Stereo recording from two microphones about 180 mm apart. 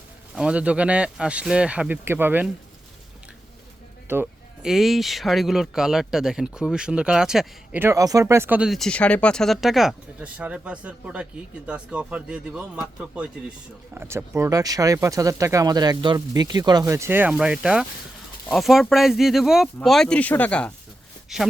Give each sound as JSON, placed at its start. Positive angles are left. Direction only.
{"t": 0.3, "sound": "speech", "side_deg": -5}
{"t": 4.1, "sound": "speech", "side_deg": -5}